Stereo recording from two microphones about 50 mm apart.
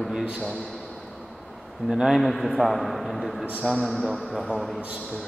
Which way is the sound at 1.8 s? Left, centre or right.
Centre.